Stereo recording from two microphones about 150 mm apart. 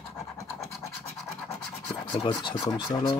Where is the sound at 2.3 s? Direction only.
30° left (ahead or behind).